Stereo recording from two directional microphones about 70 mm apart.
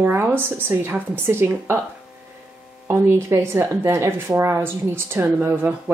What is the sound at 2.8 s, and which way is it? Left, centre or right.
Speech, right.